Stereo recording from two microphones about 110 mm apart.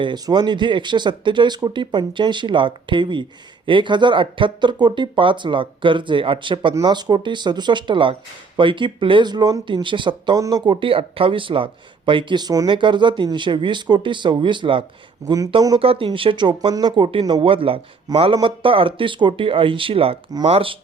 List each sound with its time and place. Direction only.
0.0 s speech: 40° right (ahead or behind)
10.3 s speech: 35° right (ahead or behind)
10.8 s speech: 55° right (ahead or behind)
15.2 s speech: 30° right (ahead or behind)
15.8 s a man's voice: 60° right (ahead or behind)